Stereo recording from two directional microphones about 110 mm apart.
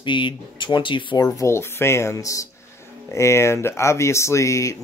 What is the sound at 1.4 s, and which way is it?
Speech, 25° left (ahead or behind).